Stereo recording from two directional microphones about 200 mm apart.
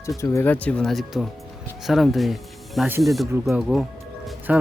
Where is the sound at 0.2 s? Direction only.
10° left (ahead or behind).